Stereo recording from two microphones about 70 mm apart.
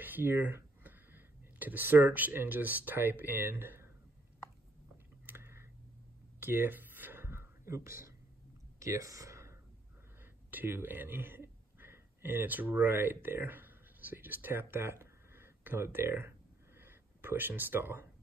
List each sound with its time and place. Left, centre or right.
0.0 s speech: right
5.2 s typing: right
6.4 s a sound: right
10.5 s speech: right